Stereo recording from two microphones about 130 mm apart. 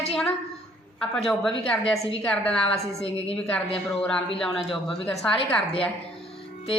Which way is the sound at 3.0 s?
50° left (ahead or behind).